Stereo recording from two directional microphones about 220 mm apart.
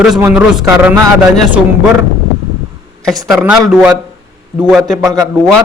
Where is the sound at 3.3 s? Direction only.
5° right (ahead or behind).